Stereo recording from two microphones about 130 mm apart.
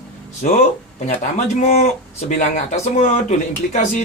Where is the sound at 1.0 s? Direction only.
60° left (ahead or behind).